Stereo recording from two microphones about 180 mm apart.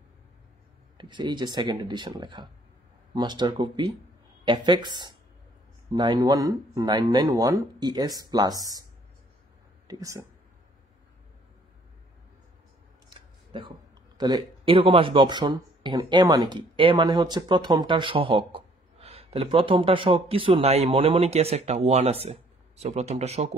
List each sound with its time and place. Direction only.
0.9 s speech: 25° right (ahead or behind)
9.8 s speech: 20° right (ahead or behind)
13.5 s speech: 25° right (ahead or behind)